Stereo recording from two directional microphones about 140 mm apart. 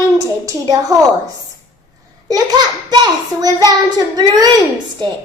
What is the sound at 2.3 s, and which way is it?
Child singing, 30° right (ahead or behind).